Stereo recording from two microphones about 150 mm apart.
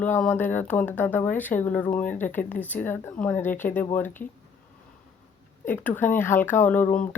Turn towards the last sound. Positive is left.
turn(degrees=10)  # may be behind; listen again after turning